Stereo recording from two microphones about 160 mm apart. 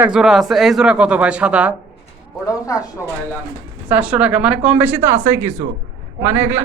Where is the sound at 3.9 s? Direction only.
5° right (ahead or behind).